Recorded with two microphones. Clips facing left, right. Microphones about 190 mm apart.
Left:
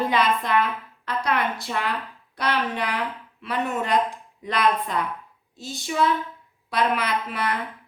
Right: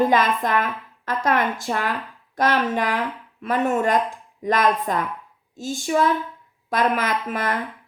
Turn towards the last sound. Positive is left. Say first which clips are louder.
# right 2 dB
turn(degrees=-45)  # may be behind; listen again after turning